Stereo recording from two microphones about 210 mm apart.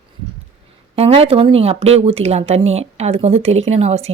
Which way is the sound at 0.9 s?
30° right (ahead or behind).